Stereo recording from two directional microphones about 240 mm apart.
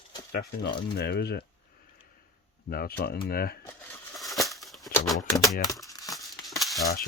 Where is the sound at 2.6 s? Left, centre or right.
Left.